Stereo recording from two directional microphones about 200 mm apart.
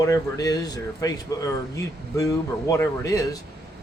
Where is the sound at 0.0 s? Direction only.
15° left (ahead or behind).